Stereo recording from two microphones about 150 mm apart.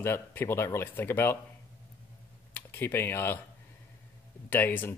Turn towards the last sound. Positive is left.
turn(degrees=15)  # may be behind; listen again after turning